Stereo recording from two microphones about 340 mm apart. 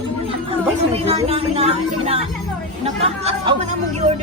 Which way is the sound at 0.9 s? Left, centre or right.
Centre.